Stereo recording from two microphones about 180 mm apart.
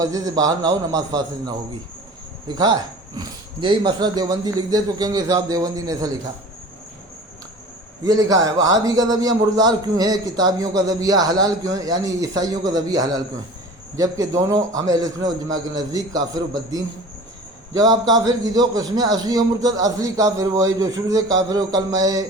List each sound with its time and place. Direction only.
0.0 s a man's voice: 20° right (ahead or behind)
8.0 s a man's voice: 20° right (ahead or behind)